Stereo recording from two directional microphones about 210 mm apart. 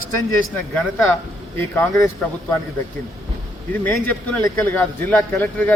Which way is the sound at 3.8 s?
10° left (ahead or behind).